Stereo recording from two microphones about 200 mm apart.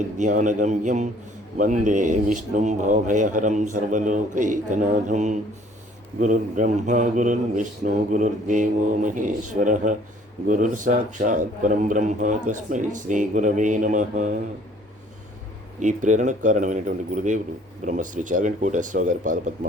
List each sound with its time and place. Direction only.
0.2 s speech: 40° right (ahead or behind)
15.8 s speech: 40° right (ahead or behind)